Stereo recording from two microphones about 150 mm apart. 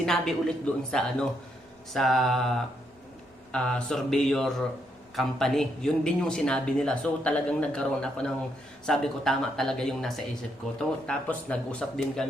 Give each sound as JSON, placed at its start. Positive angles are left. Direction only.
{"t": 0.0, "sound": "speech", "side_deg": 5}